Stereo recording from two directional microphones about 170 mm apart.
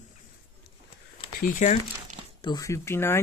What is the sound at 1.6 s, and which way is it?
Speech, 45° left (ahead or behind).